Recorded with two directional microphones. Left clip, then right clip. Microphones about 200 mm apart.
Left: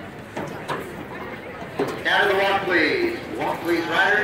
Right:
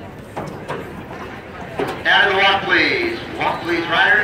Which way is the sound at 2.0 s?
25° left (ahead or behind).